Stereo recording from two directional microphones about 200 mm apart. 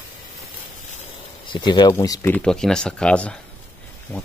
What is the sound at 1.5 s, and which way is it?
Speech, 20° left (ahead or behind).